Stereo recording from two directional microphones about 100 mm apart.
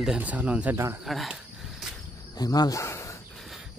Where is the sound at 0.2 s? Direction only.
15° right (ahead or behind).